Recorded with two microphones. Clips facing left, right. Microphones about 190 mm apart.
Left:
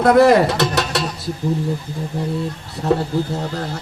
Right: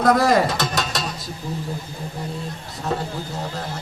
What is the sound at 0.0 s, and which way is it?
Speech, 60° left (ahead or behind).